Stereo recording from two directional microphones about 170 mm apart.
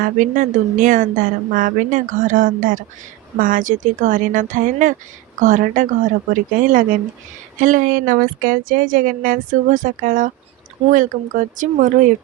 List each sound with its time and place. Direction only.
0.0 s a woman's voice: 50° right (ahead or behind)